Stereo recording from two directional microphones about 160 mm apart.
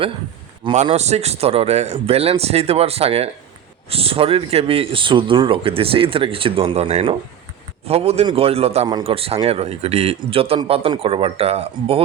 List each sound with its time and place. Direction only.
0.9 s speech: 40° right (ahead or behind)